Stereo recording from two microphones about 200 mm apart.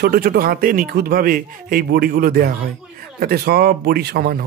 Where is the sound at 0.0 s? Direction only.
50° right (ahead or behind).